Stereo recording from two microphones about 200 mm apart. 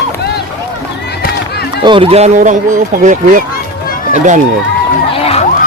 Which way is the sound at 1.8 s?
25° right (ahead or behind).